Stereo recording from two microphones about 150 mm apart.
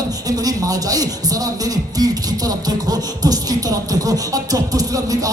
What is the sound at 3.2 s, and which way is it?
A man's voice, 25° right (ahead or behind).